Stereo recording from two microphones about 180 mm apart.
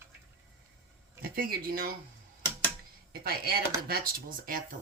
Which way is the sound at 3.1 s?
55° right (ahead or behind).